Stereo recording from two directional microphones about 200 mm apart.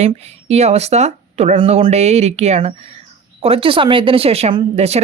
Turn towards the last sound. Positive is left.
turn(degrees=-30)  # may be behind; listen again after turning